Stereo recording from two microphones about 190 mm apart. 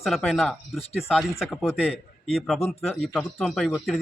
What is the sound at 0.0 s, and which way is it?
A woman's voice, centre (ahead or behind).